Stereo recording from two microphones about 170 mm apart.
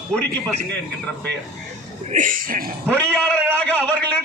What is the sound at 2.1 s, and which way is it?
Speech, 50° right (ahead or behind).